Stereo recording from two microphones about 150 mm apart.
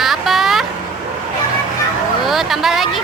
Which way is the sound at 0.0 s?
Centre (ahead or behind).